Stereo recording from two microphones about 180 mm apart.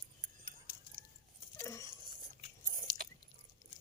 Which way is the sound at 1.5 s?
20° left (ahead or behind).